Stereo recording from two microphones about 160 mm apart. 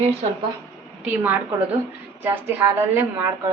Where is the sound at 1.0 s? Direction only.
10° right (ahead or behind).